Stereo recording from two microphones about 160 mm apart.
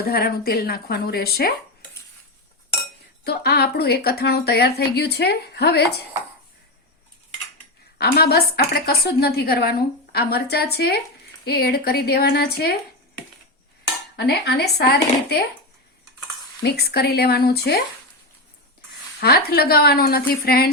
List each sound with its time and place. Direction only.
0.0 s speech: 70° left (ahead or behind)
3.2 s a woman's voice: 80° left
7.9 s a woman's voice: 80° left
14.3 s speech: 90° left
16.6 s a woman's voice: 80° left
19.2 s speech: 80° left